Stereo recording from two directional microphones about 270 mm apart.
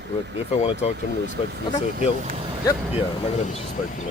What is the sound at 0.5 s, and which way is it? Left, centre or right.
Speech, left.